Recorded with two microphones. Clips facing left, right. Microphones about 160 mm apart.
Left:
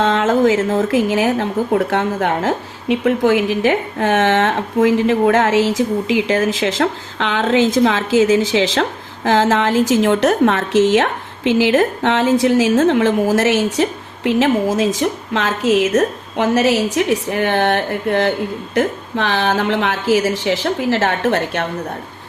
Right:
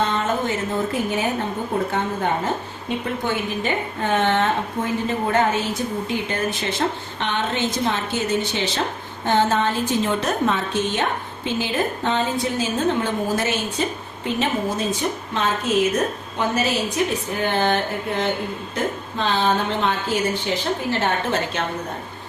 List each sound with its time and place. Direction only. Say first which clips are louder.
0.0 s a woman's voice: left 8 dB; 90° left; by 21.7 s 65° left (ahead or behind)